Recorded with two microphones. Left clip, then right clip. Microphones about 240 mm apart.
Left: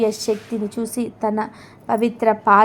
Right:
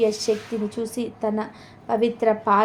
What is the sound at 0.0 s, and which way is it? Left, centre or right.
A woman's voice, left.